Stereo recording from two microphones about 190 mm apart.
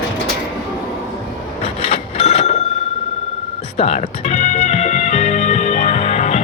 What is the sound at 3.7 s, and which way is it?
Music, 35° left (ahead or behind).